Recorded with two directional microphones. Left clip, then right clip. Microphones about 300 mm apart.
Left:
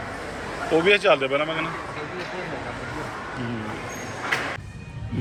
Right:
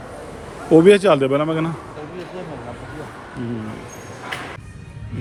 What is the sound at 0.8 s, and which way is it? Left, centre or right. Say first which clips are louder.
Speech: right 4 dB; right.